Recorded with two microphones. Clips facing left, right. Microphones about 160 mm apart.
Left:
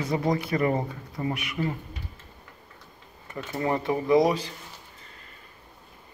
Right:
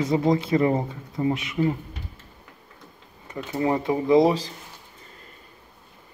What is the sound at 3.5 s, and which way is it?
Speech, 20° right (ahead or behind).